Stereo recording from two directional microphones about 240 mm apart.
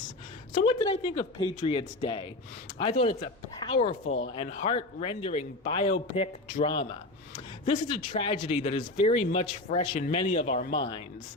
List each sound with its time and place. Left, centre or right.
0.6 s speech: left